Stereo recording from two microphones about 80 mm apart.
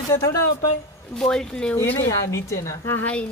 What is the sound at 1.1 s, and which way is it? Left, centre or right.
Speech, centre.